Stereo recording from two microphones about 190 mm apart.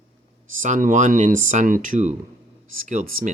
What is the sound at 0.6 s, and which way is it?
Speech, 45° right (ahead or behind).